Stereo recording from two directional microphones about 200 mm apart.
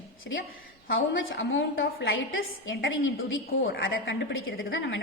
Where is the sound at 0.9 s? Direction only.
75° left (ahead or behind).